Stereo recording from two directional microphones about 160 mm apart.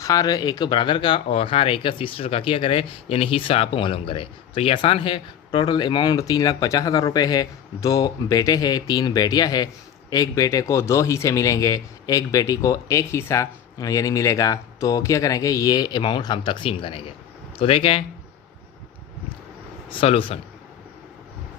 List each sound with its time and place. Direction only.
0.0 s a man's voice: 25° left (ahead or behind)
19.9 s a man's voice: 35° left (ahead or behind)